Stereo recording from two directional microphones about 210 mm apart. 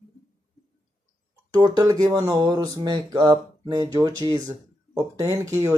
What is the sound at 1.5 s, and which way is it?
Speech, 15° right (ahead or behind).